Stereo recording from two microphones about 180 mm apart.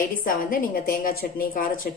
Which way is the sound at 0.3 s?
50° left (ahead or behind).